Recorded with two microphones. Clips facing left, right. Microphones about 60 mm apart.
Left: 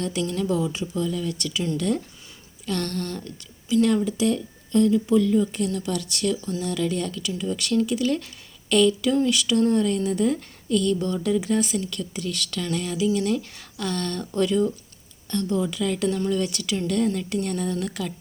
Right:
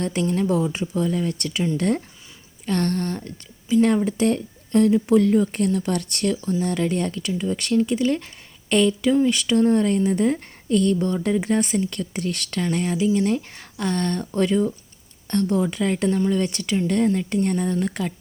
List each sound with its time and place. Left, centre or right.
0.0 s a woman's voice: right
0.5 s a woman's voice: right
15.3 s a woman's voice: right